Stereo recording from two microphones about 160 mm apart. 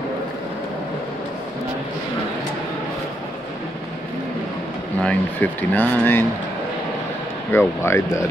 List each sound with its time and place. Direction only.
5.0 s speech: 10° left (ahead or behind)
7.5 s speech: 15° left (ahead or behind)